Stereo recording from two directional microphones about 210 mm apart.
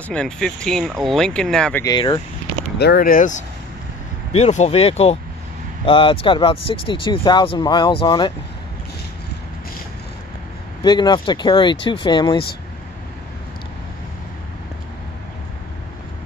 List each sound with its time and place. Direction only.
0.1 s speech: 5° left (ahead or behind)
2.0 s speech: 20° left (ahead or behind)
2.8 s speech: 45° left (ahead or behind); by 8.3 s 25° left (ahead or behind)
10.8 s speech: 20° left (ahead or behind)